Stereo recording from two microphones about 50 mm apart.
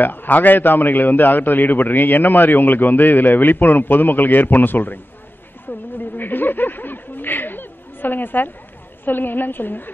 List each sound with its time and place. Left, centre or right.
0.0 s a man's voice: left
5.7 s a sound: left
9.0 s a man's voice: left